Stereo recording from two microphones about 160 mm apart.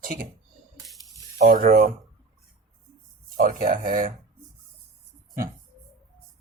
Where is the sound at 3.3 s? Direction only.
60° right (ahead or behind).